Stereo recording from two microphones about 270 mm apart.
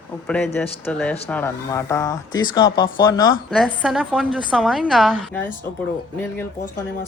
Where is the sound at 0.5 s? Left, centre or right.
Centre.